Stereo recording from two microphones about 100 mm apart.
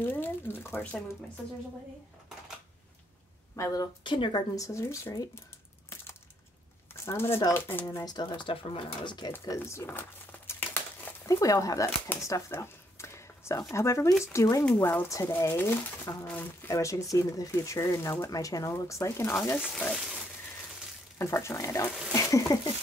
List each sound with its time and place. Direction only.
0.0 s speech: 20° left (ahead or behind)
3.5 s speech: 35° left (ahead or behind)
4.0 s speech: 55° left (ahead or behind)
4.6 s speech: 30° left (ahead or behind)
7.1 s speech: 25° left (ahead or behind)
7.9 s speech: 40° left (ahead or behind)
9.3 s crumpling: 30° left (ahead or behind)
11.2 s speech: 35° left (ahead or behind)
12.2 s a sound: 30° left (ahead or behind)
13.6 s speech: 30° left (ahead or behind)
19.7 s frying: 5° left (ahead or behind)
21.2 s speech: 30° left (ahead or behind)